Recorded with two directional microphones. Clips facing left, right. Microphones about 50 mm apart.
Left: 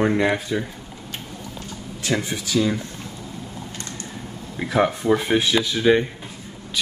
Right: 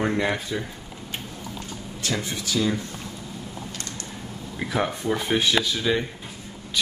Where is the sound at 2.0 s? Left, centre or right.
Left.